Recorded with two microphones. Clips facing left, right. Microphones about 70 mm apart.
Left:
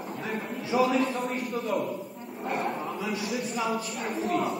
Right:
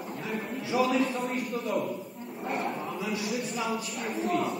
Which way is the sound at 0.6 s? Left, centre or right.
Centre.